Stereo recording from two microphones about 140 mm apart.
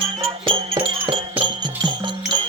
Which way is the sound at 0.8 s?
40° right (ahead or behind).